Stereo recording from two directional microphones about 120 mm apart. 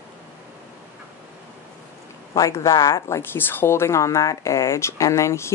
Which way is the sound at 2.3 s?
30° left (ahead or behind).